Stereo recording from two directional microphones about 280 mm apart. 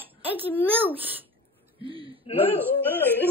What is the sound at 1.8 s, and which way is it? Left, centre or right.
Speech, centre.